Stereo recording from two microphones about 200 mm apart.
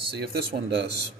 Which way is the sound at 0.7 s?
60° right (ahead or behind).